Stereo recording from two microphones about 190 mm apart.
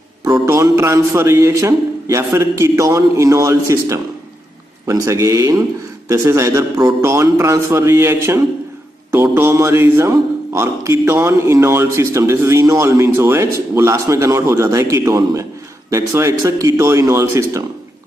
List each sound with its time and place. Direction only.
0.2 s a man's voice: 15° right (ahead or behind)